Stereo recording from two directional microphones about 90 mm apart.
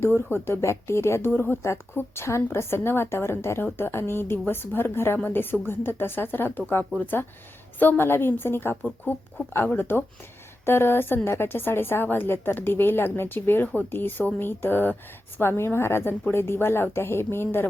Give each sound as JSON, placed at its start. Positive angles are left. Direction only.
{"t": 0.0, "sound": "a woman's voice", "side_deg": 25}